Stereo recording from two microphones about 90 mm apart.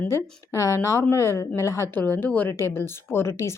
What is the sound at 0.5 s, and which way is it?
Speech, 35° left (ahead or behind).